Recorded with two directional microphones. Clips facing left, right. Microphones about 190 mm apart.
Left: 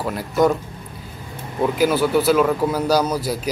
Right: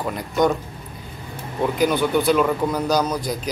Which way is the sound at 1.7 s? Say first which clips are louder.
Left 2 dB; 5° left (ahead or behind).